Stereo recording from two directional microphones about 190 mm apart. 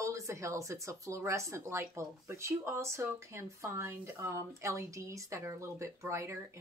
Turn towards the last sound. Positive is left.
turn(degrees=-15)  # may be behind; listen again after turning